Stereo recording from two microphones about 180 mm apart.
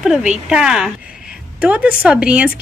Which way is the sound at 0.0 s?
Centre (ahead or behind).